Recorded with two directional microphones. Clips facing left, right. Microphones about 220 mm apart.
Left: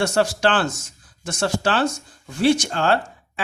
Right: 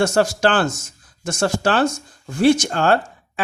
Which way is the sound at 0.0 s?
45° right (ahead or behind).